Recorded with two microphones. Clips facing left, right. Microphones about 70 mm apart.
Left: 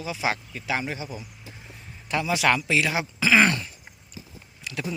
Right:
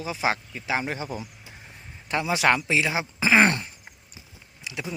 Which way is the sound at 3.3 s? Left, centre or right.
Right.